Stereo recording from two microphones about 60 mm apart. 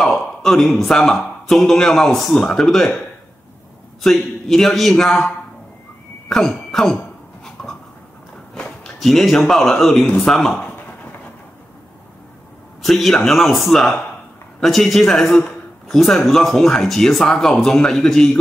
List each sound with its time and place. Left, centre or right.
0.0 s a man's voice: centre
4.0 s a man's voice: centre
7.6 s a sound: centre
9.0 s a man's voice: centre
12.8 s a man's voice: centre